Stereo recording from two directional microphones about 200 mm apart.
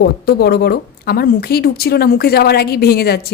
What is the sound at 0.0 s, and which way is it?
A woman's voice, 50° left (ahead or behind).